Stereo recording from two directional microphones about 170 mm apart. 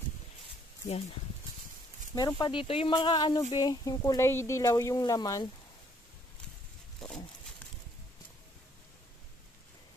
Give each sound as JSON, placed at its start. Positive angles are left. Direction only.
{"t": 2.1, "sound": "speech", "side_deg": 25}